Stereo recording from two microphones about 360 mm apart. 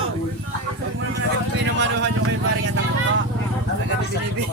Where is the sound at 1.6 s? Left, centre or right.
Right.